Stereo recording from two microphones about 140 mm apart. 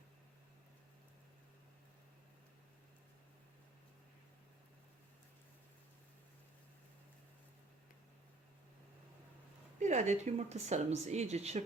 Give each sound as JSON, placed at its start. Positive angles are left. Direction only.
{"t": 9.8, "sound": "speech", "side_deg": -60}